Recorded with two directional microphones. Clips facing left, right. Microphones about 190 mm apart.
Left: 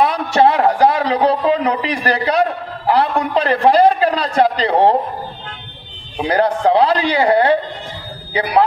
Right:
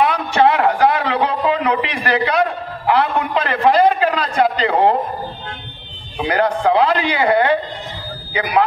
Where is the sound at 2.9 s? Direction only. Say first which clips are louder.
Left 1 dB; 35° left (ahead or behind).